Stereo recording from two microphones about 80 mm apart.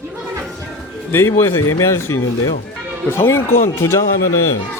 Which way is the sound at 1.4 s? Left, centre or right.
Left.